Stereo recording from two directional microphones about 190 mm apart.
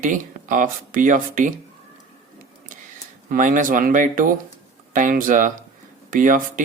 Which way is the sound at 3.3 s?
45° right (ahead or behind).